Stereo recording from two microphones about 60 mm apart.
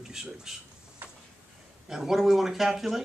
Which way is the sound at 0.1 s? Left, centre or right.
Centre.